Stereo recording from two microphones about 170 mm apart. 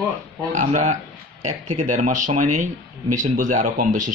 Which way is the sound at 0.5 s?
45° right (ahead or behind).